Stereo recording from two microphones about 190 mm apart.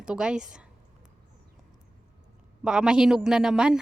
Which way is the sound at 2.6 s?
5° right (ahead or behind).